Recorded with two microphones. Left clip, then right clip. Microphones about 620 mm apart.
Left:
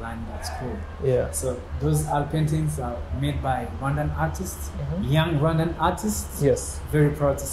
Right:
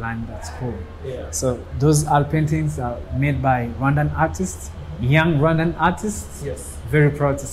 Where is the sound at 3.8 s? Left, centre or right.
Right.